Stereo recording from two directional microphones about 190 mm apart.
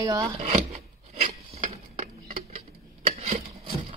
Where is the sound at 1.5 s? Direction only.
40° right (ahead or behind).